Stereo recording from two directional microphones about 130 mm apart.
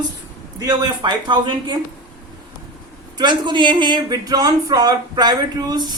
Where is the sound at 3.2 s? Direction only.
35° right (ahead or behind).